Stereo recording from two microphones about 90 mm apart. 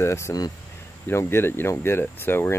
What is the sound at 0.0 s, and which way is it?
Speech, 30° left (ahead or behind).